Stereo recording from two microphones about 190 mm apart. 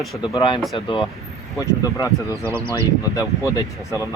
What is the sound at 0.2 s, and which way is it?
Speech, 25° left (ahead or behind).